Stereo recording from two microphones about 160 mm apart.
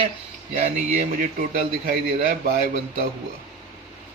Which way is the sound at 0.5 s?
50° right (ahead or behind).